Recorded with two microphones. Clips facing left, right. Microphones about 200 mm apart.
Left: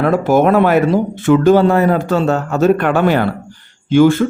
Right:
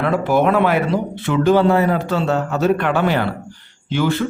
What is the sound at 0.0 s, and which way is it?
A man's voice, 45° left (ahead or behind).